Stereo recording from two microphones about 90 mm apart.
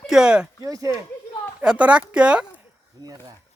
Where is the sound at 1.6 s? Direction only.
10° right (ahead or behind).